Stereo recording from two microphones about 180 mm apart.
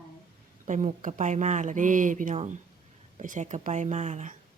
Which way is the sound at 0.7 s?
40° right (ahead or behind).